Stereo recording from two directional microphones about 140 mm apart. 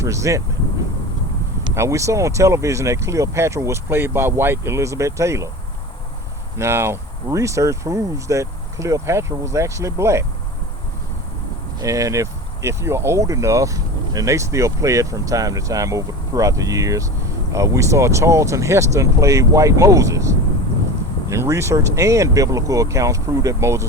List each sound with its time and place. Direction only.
0.0 s speech: 20° right (ahead or behind)
1.7 s speech: 20° right (ahead or behind)
6.6 s speech: 20° right (ahead or behind)
11.8 s speech: 25° right (ahead or behind)